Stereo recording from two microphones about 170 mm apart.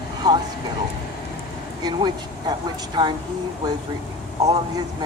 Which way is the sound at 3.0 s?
25° right (ahead or behind).